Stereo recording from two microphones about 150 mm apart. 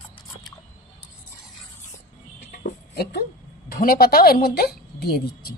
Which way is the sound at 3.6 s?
80° left.